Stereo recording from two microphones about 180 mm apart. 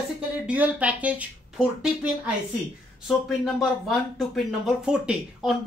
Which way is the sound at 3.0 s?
Centre (ahead or behind).